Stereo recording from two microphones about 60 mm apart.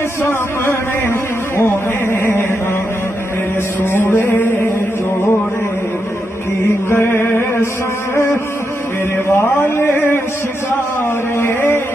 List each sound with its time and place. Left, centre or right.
0.3 s speech: left
2.1 s mantra: left
3.8 s mantra: left
6.9 s mantra: left
9.3 s mantra: left
11.3 s mantra: left